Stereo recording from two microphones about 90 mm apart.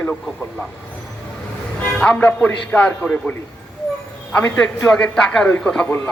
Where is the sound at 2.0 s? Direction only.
15° left (ahead or behind).